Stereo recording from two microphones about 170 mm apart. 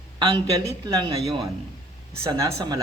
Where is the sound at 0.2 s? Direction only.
30° right (ahead or behind).